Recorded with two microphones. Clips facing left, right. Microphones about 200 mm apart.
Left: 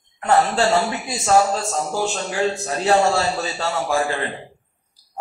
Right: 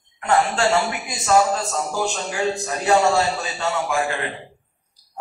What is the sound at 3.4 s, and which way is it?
Speech, 35° left (ahead or behind).